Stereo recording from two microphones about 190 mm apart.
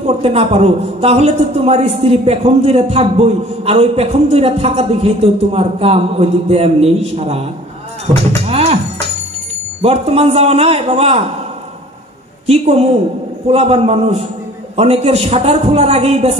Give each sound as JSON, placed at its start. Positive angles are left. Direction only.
{"t": 0.2, "sound": "a man's voice", "side_deg": -30}
{"t": 8.5, "sound": "a man's voice", "side_deg": -35}
{"t": 9.8, "sound": "a man's voice", "side_deg": -35}
{"t": 12.4, "sound": "a man's voice", "side_deg": -35}